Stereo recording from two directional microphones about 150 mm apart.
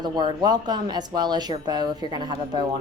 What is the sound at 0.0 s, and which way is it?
A woman's voice, 30° right (ahead or behind).